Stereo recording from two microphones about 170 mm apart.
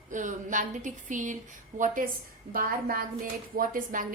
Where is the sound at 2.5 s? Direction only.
55° right (ahead or behind).